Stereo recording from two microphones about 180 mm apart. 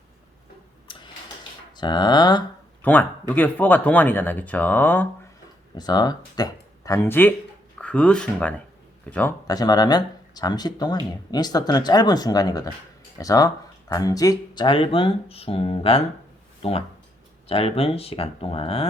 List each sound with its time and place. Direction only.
0.9 s a sound: 25° left (ahead or behind)
1.7 s speech: 25° left (ahead or behind)
2.8 s speech: 10° left (ahead or behind)
5.7 s speech: 20° left (ahead or behind)
9.5 s speech: 20° left (ahead or behind)